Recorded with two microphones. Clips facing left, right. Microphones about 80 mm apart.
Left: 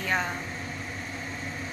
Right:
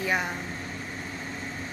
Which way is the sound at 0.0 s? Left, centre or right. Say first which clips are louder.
Right 1 dB; centre.